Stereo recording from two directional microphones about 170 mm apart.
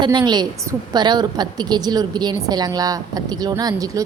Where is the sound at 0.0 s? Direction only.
25° right (ahead or behind).